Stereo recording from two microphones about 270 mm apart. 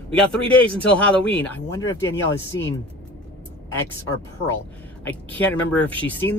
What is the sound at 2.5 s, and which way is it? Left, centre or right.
Speech, left.